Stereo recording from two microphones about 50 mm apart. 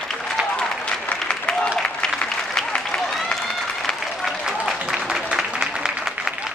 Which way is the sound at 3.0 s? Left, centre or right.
Centre.